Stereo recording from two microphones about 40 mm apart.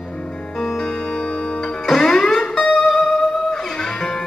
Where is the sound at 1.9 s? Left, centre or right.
Centre.